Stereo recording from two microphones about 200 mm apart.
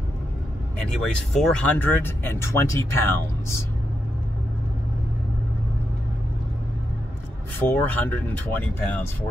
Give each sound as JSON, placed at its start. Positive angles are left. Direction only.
{"t": 1.0, "sound": "speech", "side_deg": 5}
{"t": 7.5, "sound": "speech", "side_deg": 10}